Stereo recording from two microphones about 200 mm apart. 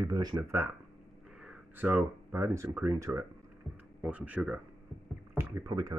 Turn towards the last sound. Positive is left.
turn(degrees=-20)  # may be behind; listen again after turning